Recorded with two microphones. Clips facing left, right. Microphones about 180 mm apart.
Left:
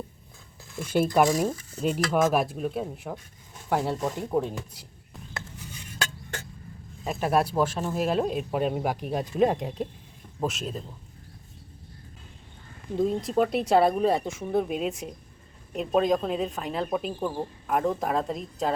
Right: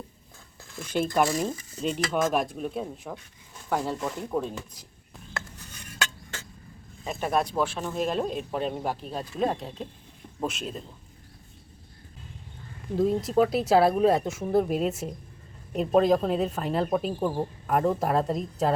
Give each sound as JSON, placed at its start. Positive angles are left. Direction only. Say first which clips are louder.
{"t": 0.7, "sound": "speech", "louder": "left 3 dB", "side_deg": 5}
{"t": 3.9, "sound": "speech", "louder": "left 3 dB", "side_deg": 20}
{"t": 7.0, "sound": "speech", "louder": "left 2 dB", "side_deg": 5}
{"t": 10.4, "sound": "speech", "louder": "left 2 dB", "side_deg": 0}
{"t": 13.0, "sound": "speech", "louder": "right 2 dB", "side_deg": 0}